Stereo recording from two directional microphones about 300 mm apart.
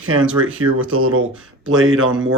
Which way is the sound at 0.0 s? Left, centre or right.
Right.